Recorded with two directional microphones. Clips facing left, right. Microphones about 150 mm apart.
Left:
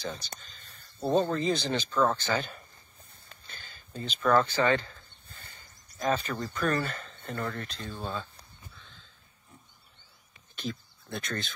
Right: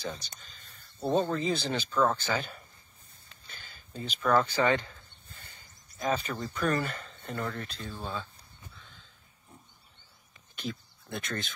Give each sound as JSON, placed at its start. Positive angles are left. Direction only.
{"t": 1.0, "sound": "speech", "side_deg": 0}
{"t": 5.9, "sound": "speech", "side_deg": -5}
{"t": 10.5, "sound": "a sound", "side_deg": -10}